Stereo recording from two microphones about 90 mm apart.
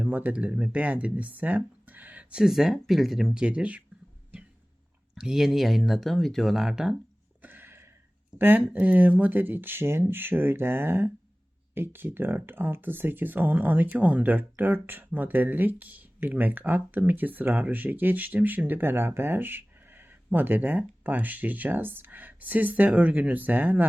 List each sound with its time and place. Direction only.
0.0 s speech: 20° right (ahead or behind)
2.4 s speech: centre (ahead or behind)
3.4 s speech: 15° right (ahead or behind)
5.1 s speech: 5° right (ahead or behind)
7.4 s a sound: 25° right (ahead or behind)
8.4 s speech: 20° right (ahead or behind)